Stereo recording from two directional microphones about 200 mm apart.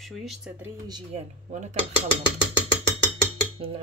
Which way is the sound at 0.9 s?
35° right (ahead or behind).